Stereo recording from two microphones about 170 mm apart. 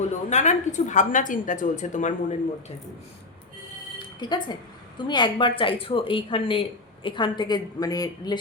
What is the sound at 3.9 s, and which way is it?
Music, 25° left (ahead or behind).